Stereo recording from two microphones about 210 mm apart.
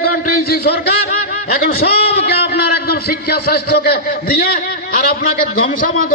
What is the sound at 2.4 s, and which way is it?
A man's voice, 50° left (ahead or behind).